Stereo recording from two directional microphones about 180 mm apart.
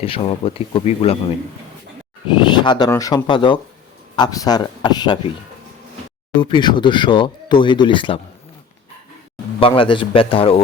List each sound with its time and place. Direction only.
0.0 s speech: 30° left (ahead or behind)
2.5 s speech: 25° left (ahead or behind)
6.4 s speech: 25° left (ahead or behind)
9.6 s speech: 30° left (ahead or behind)